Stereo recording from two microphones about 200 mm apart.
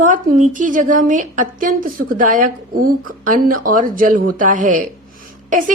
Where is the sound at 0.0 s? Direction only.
40° right (ahead or behind).